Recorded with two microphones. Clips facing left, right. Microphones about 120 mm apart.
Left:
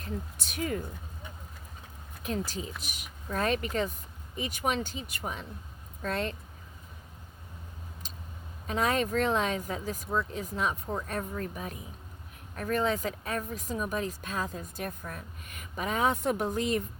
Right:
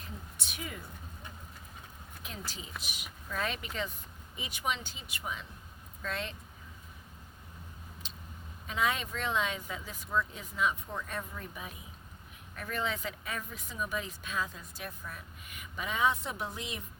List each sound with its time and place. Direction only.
0.3 s speech: 40° left (ahead or behind)
2.2 s speech: 40° left (ahead or behind)
8.0 s vehicle: 40° left (ahead or behind)
8.6 s speech: 45° left (ahead or behind)